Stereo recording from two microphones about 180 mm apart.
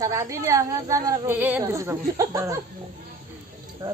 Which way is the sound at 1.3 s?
10° right (ahead or behind).